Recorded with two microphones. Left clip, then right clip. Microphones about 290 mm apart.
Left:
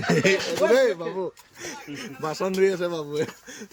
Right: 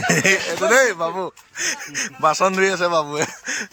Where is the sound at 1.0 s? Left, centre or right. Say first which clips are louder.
Right 6 dB; centre.